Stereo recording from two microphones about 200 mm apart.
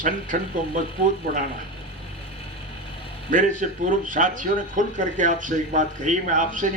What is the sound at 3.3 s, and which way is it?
Speech, 40° right (ahead or behind).